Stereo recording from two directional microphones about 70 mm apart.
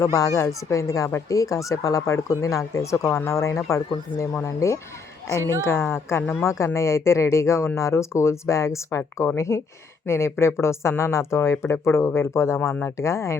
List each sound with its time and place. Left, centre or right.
0.0 s speech: left
5.4 s speech: right
5.6 s a woman's voice: left